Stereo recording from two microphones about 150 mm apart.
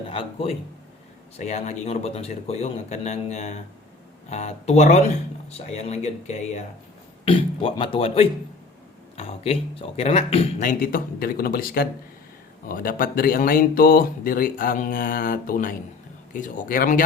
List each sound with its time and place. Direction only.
0.1 s speech: 35° left (ahead or behind)
1.4 s a man's voice: 50° left (ahead or behind)
7.3 s speech: 35° left (ahead or behind)
10.6 s speech: 65° left (ahead or behind); by 11.9 s 90° left
12.6 s speech: 70° left (ahead or behind)